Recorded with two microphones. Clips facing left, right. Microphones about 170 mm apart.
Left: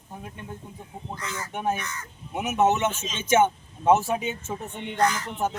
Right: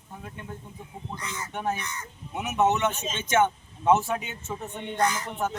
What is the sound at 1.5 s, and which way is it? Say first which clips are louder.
Speech: left 2 dB; 20° left (ahead or behind).